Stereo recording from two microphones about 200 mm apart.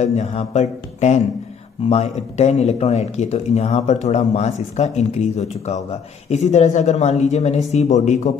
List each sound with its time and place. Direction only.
0.0 s speech: 35° left (ahead or behind)